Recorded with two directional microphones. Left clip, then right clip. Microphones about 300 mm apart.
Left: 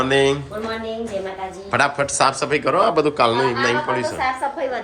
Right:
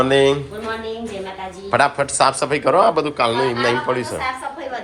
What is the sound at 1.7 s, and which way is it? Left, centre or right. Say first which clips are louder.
A man's voice: right 2 dB; centre.